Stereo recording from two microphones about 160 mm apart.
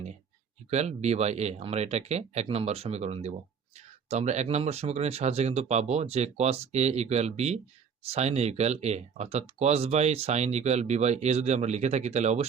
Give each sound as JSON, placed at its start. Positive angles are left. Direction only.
{"t": 0.7, "sound": "speech", "side_deg": -45}